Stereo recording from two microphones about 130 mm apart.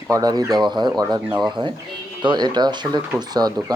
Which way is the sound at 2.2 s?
35° right (ahead or behind).